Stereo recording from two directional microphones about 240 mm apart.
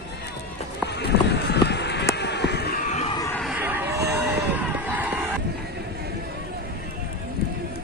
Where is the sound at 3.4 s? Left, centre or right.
Centre.